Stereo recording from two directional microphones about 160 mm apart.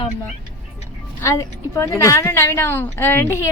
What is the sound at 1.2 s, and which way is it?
A woman's voice, 20° left (ahead or behind).